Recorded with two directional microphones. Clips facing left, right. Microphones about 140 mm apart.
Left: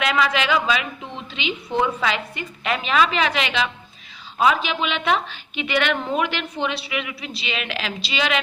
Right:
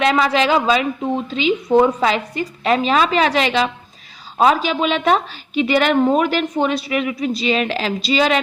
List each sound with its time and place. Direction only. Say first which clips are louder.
0.0 s a woman's voice: right 5 dB; 35° right (ahead or behind)